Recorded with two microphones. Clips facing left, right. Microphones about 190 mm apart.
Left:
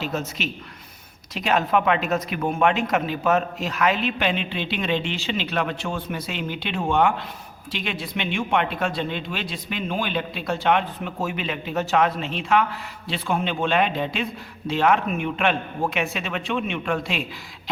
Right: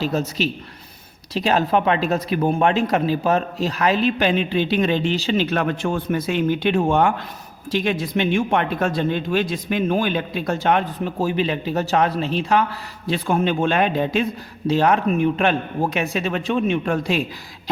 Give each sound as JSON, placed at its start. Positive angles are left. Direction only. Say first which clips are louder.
{"t": 0.0, "sound": "speech", "louder": "right 6 dB", "side_deg": -35}